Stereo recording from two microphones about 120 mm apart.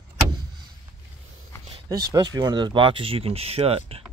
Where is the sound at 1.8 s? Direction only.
30° right (ahead or behind); by 4.0 s 55° right (ahead or behind).